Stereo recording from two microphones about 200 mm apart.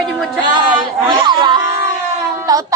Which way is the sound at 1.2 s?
20° right (ahead or behind).